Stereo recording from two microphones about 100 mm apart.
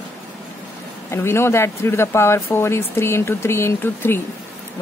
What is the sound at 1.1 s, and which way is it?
Speech, 25° left (ahead or behind).